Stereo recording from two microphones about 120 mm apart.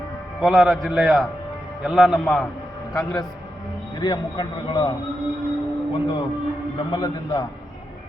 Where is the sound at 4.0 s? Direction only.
30° left (ahead or behind).